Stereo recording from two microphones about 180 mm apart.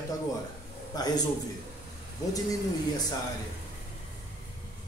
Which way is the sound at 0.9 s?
20° left (ahead or behind).